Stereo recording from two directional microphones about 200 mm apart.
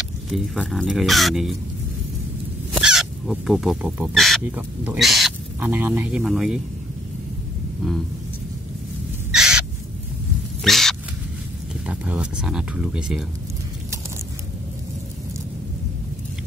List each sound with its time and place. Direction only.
0.3 s speech: centre (ahead or behind)
2.7 s speech: centre (ahead or behind)
7.8 s speech: centre (ahead or behind)
9.3 s crow: 5° right (ahead or behind)
10.6 s a sound: centre (ahead or behind)
11.8 s speech: 5° right (ahead or behind)